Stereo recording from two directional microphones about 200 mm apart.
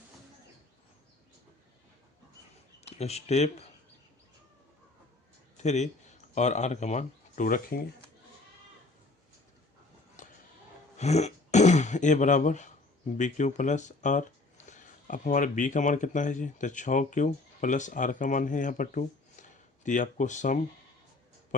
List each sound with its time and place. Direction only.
2.8 s speech: 30° left (ahead or behind)
5.6 s speech: 35° left (ahead or behind)
10.2 s a sound: 40° left (ahead or behind)
10.9 s speech: 35° left (ahead or behind)